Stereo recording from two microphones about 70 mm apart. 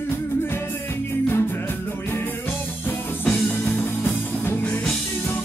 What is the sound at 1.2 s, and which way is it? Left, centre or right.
Music, left.